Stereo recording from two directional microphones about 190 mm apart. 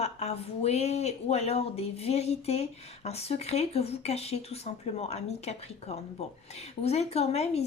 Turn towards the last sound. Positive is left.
turn(degrees=35)  # may be behind; listen again after turning